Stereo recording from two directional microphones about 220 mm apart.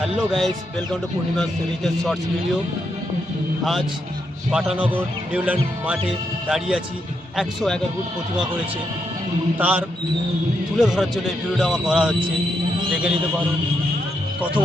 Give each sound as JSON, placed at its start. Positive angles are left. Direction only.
{"t": 0.0, "sound": "a man's voice", "side_deg": 0}
{"t": 3.6, "sound": "a man's voice", "side_deg": 0}
{"t": 9.6, "sound": "a man's voice", "side_deg": -10}